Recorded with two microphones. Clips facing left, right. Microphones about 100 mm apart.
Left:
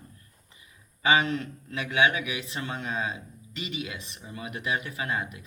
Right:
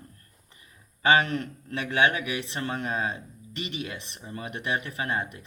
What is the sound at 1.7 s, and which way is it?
Speech, 40° right (ahead or behind).